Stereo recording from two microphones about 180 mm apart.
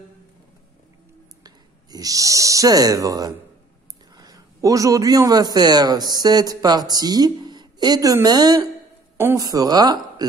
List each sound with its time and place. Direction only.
1.4 s a man's voice: 20° right (ahead or behind)